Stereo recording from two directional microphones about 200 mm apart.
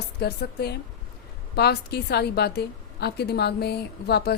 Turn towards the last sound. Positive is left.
turn(degrees=55)  # may be behind; listen again after turning